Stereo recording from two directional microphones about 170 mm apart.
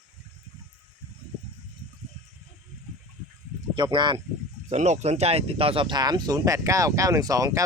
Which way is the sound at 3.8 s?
25° right (ahead or behind).